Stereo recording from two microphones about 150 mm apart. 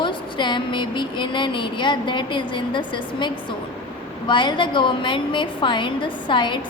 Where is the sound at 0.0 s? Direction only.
30° left (ahead or behind).